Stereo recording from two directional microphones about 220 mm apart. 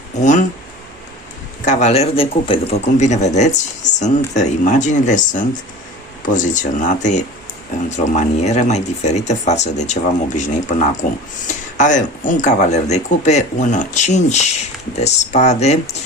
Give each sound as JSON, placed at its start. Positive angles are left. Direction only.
{"t": 0.2, "sound": "speech", "side_deg": 35}
{"t": 1.6, "sound": "speech", "side_deg": 30}